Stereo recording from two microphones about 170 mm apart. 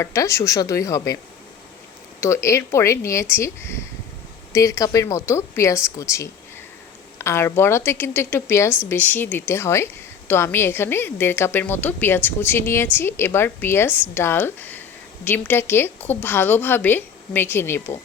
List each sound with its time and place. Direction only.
0.0 s speech: 15° left (ahead or behind)
2.2 s a woman's voice: 15° left (ahead or behind)